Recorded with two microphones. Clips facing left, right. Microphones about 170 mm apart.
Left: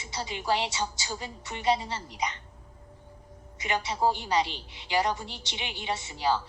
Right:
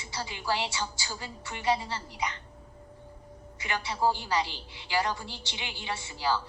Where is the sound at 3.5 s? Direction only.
20° left (ahead or behind).